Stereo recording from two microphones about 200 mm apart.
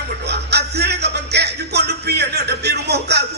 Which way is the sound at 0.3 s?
55° right (ahead or behind).